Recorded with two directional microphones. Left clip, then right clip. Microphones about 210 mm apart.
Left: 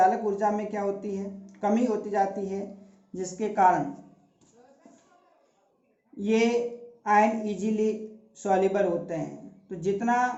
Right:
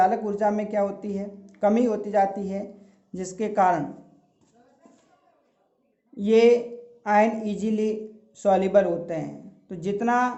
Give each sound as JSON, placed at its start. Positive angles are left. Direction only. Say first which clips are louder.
{"t": 0.0, "sound": "speech", "louder": "right 1 dB", "side_deg": -55}
{"t": 6.1, "sound": "speech", "louder": "right 7 dB", "side_deg": -55}